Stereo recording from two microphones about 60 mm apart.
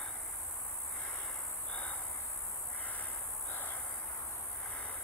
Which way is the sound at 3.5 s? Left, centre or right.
Left.